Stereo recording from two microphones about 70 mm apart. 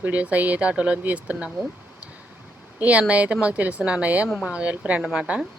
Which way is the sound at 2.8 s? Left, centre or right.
Centre.